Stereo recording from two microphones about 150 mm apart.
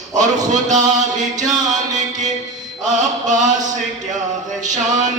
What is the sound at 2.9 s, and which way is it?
Mantra, 55° right (ahead or behind).